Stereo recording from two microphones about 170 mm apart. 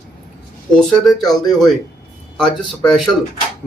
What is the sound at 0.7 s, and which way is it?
Speech, centre (ahead or behind).